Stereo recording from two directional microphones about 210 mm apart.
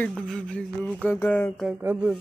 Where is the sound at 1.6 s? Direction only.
10° right (ahead or behind).